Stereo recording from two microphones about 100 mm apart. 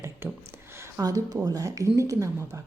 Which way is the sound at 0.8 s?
35° right (ahead or behind).